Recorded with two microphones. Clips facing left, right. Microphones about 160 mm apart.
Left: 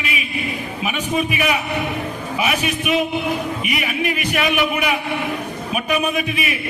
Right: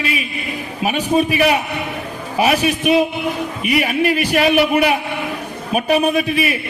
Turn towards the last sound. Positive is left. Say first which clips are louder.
# right 5 dB
turn(degrees=-30)  # may be behind; listen again after turning